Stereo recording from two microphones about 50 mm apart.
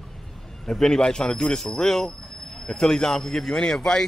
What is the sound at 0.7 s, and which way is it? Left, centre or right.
Speech, centre.